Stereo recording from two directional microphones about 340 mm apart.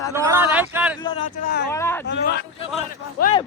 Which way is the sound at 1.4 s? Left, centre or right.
Left.